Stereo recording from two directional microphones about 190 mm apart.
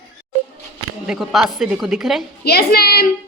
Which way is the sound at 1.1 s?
Centre (ahead or behind).